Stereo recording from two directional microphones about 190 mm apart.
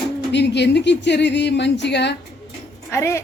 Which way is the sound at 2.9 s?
15° left (ahead or behind).